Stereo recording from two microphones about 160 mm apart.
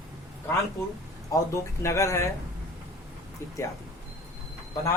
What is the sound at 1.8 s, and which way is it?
Speech, 20° left (ahead or behind).